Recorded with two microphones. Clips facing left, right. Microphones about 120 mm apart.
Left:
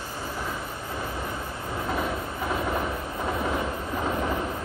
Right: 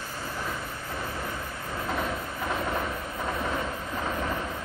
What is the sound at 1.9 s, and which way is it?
Train, 5° left (ahead or behind).